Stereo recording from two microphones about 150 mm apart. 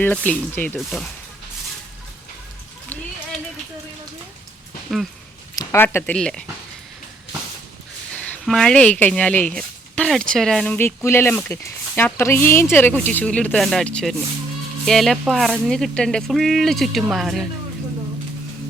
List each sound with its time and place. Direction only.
0.0 s speech: 10° left (ahead or behind)
4.9 s speech: centre (ahead or behind)
5.5 s speech: 15° left (ahead or behind)
8.1 s speech: 5° left (ahead or behind)
10.8 s speech: 15° left (ahead or behind); by 17.4 s centre (ahead or behind)